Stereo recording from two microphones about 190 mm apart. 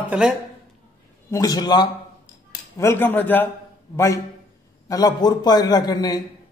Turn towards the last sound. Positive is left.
turn(degrees=20)  # may be behind; listen again after turning